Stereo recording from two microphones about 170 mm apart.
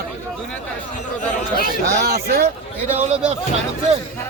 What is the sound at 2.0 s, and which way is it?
Speech, 70° right (ahead or behind).